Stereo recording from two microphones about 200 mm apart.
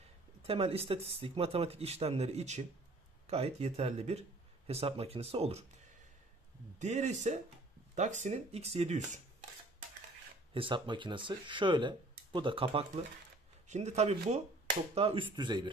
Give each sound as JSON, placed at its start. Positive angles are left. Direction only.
{"t": 0.5, "sound": "speech", "side_deg": -30}
{"t": 6.8, "sound": "speech", "side_deg": -35}
{"t": 10.5, "sound": "speech", "side_deg": -25}